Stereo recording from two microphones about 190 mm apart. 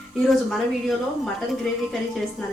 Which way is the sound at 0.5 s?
Centre (ahead or behind).